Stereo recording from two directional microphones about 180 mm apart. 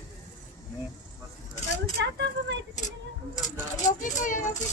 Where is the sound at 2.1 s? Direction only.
70° right (ahead or behind).